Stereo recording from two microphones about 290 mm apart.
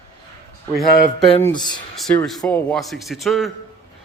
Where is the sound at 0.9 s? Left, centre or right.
Left.